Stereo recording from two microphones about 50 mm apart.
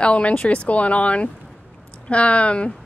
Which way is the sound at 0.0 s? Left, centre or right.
Left.